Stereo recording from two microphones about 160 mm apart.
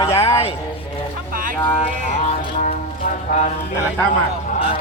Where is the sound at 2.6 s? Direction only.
55° left (ahead or behind).